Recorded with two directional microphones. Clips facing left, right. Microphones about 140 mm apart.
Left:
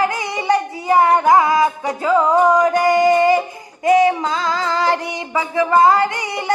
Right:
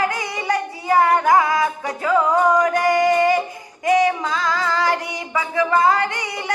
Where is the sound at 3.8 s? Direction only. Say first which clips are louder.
Left 4 dB; 25° left (ahead or behind).